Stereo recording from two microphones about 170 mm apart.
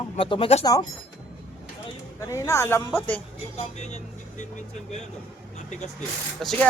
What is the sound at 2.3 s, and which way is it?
Speech, 15° left (ahead or behind).